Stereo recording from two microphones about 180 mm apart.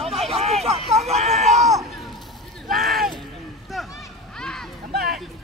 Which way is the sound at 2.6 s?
55° right (ahead or behind).